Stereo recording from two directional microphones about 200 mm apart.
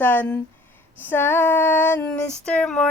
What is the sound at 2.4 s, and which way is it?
Babbling, 5° left (ahead or behind).